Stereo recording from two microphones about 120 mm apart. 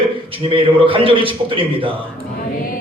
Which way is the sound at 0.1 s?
45° right (ahead or behind).